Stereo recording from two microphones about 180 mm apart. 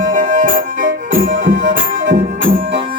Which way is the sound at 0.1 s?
45° right (ahead or behind).